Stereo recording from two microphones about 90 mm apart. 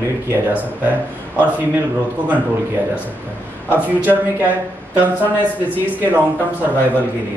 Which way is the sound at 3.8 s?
20° right (ahead or behind).